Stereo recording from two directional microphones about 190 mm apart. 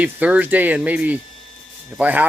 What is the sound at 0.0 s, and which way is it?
Speech, 10° right (ahead or behind).